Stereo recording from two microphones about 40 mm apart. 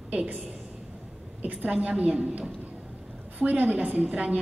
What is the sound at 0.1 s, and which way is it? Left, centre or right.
Speech, right.